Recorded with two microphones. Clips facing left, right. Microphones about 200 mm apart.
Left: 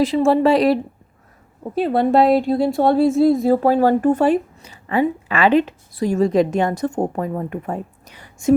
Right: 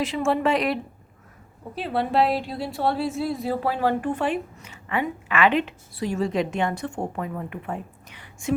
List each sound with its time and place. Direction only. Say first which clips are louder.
0.0 s a woman's voice: left 8 dB; 35° left (ahead or behind)